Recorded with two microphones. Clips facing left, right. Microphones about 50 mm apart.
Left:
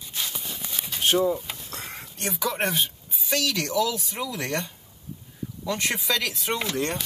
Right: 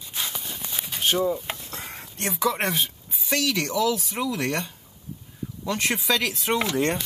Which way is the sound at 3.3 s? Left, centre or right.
Right.